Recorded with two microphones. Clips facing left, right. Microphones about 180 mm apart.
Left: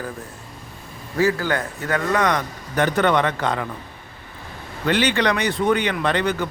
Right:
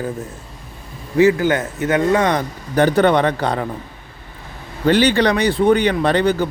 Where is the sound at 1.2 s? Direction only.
20° right (ahead or behind); by 3.7 s 35° right (ahead or behind).